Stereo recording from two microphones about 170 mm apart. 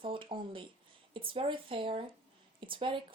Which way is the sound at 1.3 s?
30° right (ahead or behind).